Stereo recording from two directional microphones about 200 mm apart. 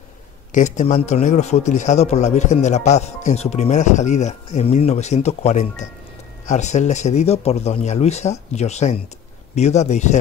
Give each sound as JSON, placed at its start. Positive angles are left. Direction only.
{"t": 0.5, "sound": "a man's voice", "side_deg": 40}